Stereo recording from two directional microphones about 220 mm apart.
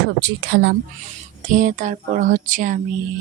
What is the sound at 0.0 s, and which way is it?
Speech, 50° right (ahead or behind).